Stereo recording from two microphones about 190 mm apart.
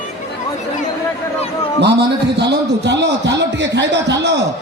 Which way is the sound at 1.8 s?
65° right (ahead or behind).